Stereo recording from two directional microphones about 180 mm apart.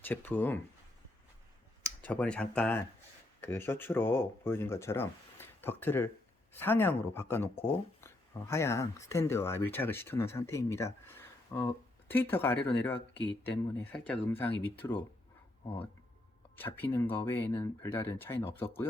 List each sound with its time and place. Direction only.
0.0 s speech: 10° left (ahead or behind)
2.0 s speech: 10° left (ahead or behind)
7.5 s speech: 30° left (ahead or behind)
8.0 s speech: 15° left (ahead or behind)
16.6 s speech: 10° left (ahead or behind)